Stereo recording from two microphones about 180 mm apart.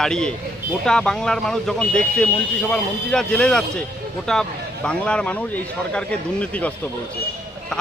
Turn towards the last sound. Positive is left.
turn(degrees=5)  # may be behind; listen again after turning